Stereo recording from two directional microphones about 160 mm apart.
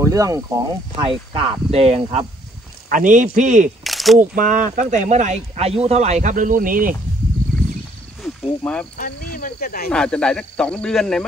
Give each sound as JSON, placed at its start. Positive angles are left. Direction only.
{"t": 0.0, "sound": "speech", "side_deg": -20}
{"t": 0.9, "sound": "speech", "side_deg": -35}
{"t": 2.9, "sound": "speech", "side_deg": -55}
{"t": 3.6, "sound": "speech", "side_deg": 0}
{"t": 4.2, "sound": "speech", "side_deg": -55}
{"t": 8.2, "sound": "a sound", "side_deg": 5}
{"t": 9.0, "sound": "speech", "side_deg": 65}
{"t": 9.8, "sound": "speech", "side_deg": 5}